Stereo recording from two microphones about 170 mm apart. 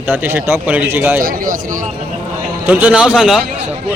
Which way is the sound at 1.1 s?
60° right (ahead or behind).